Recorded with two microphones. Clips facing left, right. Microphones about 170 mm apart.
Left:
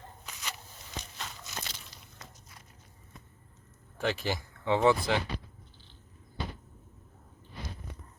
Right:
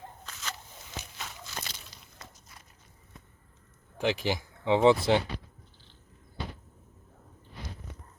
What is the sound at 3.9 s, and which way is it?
Speech, 15° right (ahead or behind).